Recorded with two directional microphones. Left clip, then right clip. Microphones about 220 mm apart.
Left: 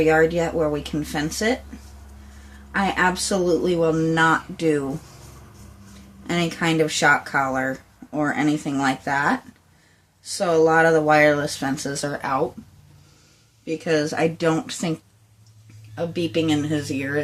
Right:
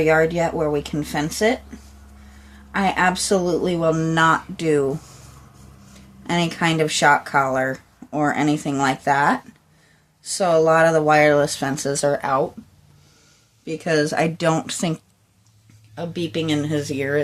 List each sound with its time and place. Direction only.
0.0 s speech: 35° right (ahead or behind)
2.7 s speech: 35° right (ahead or behind)
6.2 s speech: 35° right (ahead or behind)
13.7 s speech: 45° right (ahead or behind)
16.0 s speech: 35° right (ahead or behind)